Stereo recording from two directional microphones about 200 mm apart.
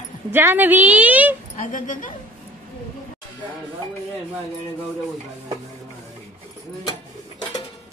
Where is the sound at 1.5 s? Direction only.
40° left (ahead or behind).